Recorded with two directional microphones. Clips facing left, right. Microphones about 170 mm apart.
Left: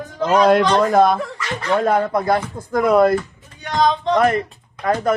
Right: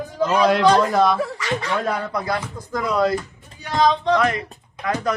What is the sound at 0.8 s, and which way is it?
Speech, 50° left (ahead or behind).